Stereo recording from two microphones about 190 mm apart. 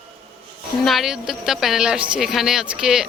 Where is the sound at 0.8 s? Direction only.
Centre (ahead or behind).